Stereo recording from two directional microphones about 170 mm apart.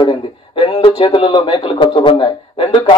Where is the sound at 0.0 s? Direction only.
30° left (ahead or behind).